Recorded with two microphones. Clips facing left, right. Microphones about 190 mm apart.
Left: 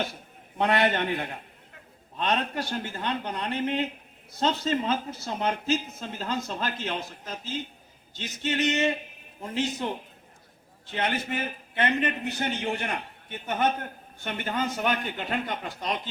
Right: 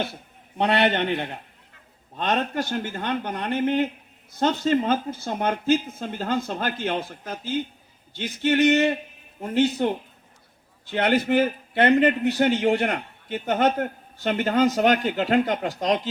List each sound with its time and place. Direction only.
0.9 s a man's voice: 25° right (ahead or behind)
2.1 s speech: 45° right (ahead or behind); by 9.7 s 65° right (ahead or behind)
10.8 s a man's voice: 65° right (ahead or behind); by 16.0 s 90° right